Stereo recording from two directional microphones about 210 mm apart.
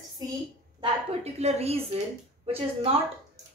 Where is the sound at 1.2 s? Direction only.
30° right (ahead or behind).